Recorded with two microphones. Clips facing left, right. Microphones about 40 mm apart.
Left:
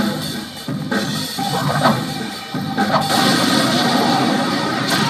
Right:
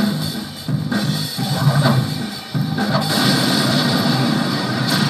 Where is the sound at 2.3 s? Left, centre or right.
Centre.